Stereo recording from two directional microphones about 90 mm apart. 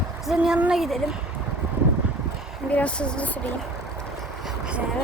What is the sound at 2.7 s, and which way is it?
Speech, 15° left (ahead or behind).